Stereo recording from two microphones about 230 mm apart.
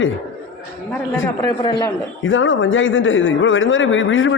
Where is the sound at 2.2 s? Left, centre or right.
Left.